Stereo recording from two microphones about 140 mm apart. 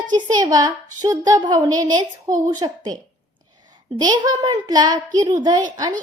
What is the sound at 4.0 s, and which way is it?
A child's voice, 30° right (ahead or behind).